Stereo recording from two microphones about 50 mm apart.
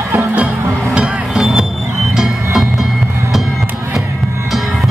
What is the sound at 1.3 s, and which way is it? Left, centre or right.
Music, centre.